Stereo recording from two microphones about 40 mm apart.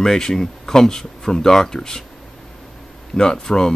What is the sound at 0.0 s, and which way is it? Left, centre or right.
Speech, centre.